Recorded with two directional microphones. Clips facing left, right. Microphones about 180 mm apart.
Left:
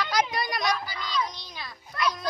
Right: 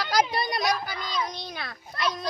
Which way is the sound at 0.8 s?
55° right (ahead or behind).